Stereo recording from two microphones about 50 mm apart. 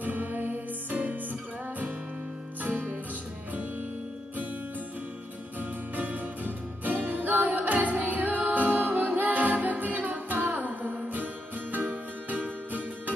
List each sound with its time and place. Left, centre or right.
0.0 s music: right
2.6 s music: right
5.6 s music: right